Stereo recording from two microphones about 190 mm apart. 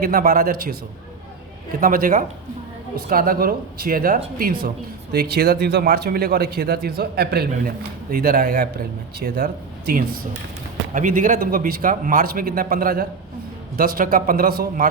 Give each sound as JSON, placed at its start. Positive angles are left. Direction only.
{"t": 0.0, "sound": "a man's voice", "side_deg": -50}
{"t": 1.8, "sound": "a man's voice", "side_deg": -45}
{"t": 10.9, "sound": "a man's voice", "side_deg": -45}